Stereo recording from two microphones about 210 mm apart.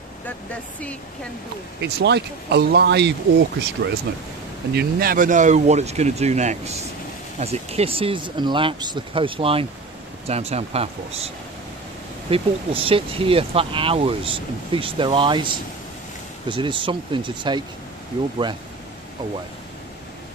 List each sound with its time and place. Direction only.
1.8 s speech: 55° right (ahead or behind)
4.7 s speech: 45° right (ahead or behind); by 17.6 s 20° right (ahead or behind)